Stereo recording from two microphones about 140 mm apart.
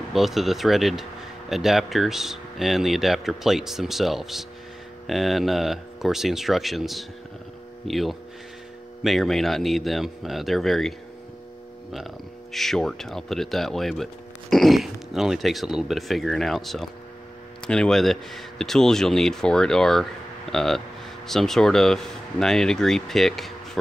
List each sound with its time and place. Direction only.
0.1 s speech: centre (ahead or behind)
12.5 s speech: centre (ahead or behind)